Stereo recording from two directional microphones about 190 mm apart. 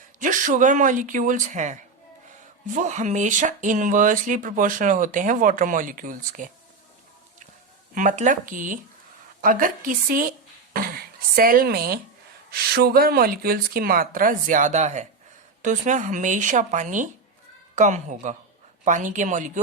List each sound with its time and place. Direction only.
0.2 s speech: 45° right (ahead or behind)
7.9 s speech: 40° right (ahead or behind)